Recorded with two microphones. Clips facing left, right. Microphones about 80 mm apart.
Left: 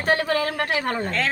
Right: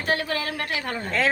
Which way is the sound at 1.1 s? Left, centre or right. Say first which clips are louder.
Right 2 dB; centre.